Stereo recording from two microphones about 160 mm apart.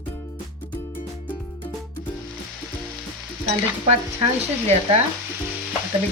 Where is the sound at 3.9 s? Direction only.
40° right (ahead or behind).